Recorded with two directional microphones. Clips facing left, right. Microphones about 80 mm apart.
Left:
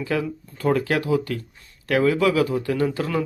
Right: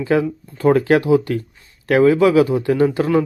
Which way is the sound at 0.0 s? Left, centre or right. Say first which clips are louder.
Right 7 dB; right.